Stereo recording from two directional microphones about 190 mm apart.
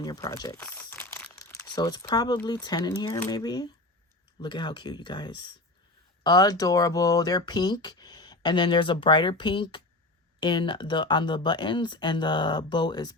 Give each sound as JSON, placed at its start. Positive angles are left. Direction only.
{"t": 0.0, "sound": "speech", "side_deg": 20}
{"t": 0.5, "sound": "crumpling", "side_deg": 10}
{"t": 1.7, "sound": "speech", "side_deg": 20}